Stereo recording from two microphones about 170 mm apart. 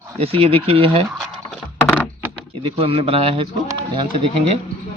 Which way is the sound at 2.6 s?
35° right (ahead or behind).